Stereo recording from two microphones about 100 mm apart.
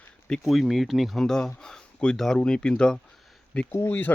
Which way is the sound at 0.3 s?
Centre (ahead or behind).